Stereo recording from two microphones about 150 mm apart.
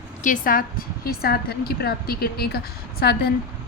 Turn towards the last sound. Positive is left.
turn(degrees=90)